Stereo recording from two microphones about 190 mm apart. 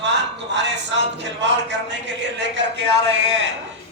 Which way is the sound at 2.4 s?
65° right (ahead or behind).